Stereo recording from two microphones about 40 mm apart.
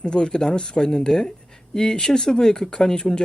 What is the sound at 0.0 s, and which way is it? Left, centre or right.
Speech, left.